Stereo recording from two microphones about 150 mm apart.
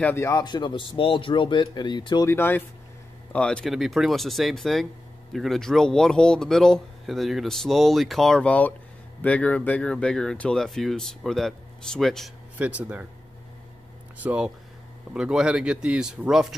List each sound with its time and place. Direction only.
0.0 s speech: 15° left (ahead or behind)
2.2 s speech: 15° left (ahead or behind)
12.5 s speech: 10° right (ahead or behind)
14.1 s speech: 10° right (ahead or behind)